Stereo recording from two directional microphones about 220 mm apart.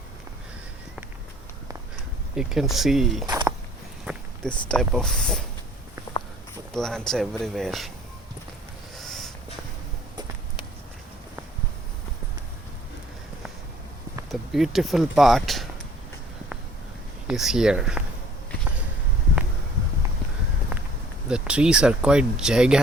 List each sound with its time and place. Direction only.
2.3 s speech: centre (ahead or behind)
4.0 s a sound: 5° right (ahead or behind)
4.7 s speech: centre (ahead or behind)
6.7 s speech: 5° left (ahead or behind)
9.0 s a sound: centre (ahead or behind)
14.3 s speech: centre (ahead or behind)
17.2 s speech: centre (ahead or behind)
21.2 s speech: 5° right (ahead or behind)